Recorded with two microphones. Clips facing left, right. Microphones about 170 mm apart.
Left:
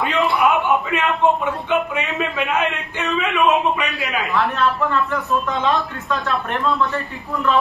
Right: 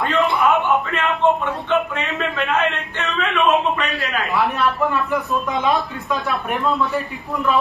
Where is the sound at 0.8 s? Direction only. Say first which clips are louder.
Even; 10° left (ahead or behind).